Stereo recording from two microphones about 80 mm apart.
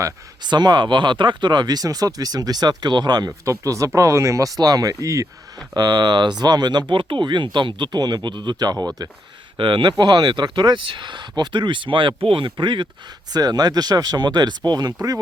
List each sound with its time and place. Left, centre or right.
0.4 s speech: right
5.7 s speech: right
9.6 s speech: right
10.0 s speech: right
13.3 s speech: right